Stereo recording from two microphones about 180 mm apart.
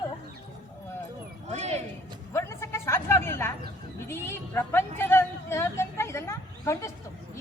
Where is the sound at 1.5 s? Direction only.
40° right (ahead or behind).